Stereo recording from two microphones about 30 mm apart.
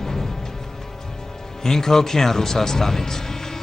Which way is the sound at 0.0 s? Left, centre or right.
Centre.